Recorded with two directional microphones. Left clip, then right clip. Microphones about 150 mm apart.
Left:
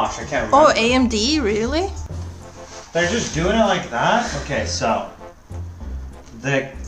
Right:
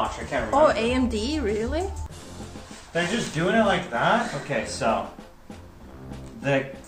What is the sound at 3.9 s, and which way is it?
Speech, 5° left (ahead or behind).